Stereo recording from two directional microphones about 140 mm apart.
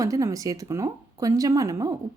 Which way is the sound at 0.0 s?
25° right (ahead or behind).